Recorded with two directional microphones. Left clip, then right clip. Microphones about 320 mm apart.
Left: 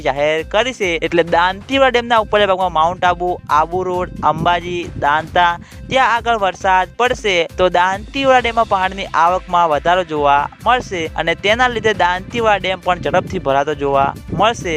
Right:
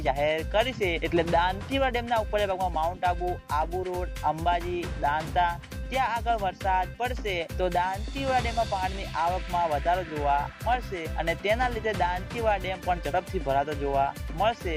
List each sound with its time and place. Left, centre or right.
0.0 s speech: left